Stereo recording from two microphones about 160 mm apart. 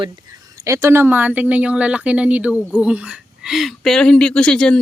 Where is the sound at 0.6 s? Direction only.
20° right (ahead or behind); by 4.8 s 5° left (ahead or behind).